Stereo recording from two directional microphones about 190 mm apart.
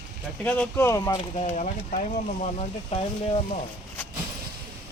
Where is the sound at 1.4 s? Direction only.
40° left (ahead or behind).